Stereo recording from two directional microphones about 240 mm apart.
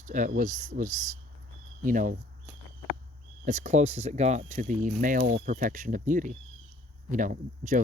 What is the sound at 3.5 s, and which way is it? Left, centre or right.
Speech, right.